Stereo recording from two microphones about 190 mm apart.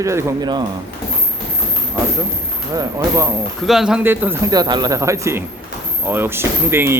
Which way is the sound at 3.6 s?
Centre (ahead or behind).